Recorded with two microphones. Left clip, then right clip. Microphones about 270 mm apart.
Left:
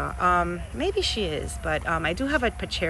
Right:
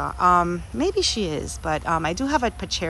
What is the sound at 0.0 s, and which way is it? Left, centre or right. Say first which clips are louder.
Speech: right 4 dB; centre.